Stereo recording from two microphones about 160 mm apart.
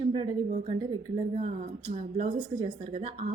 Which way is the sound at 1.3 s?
50° right (ahead or behind).